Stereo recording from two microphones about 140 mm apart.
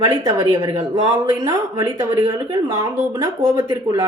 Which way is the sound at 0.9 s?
25° right (ahead or behind).